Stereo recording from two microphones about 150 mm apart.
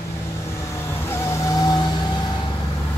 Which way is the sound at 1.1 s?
25° left (ahead or behind).